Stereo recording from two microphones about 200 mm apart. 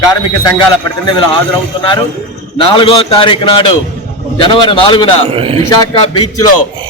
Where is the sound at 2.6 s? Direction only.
25° left (ahead or behind).